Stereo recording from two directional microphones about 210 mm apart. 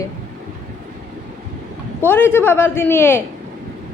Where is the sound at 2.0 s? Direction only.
10° left (ahead or behind).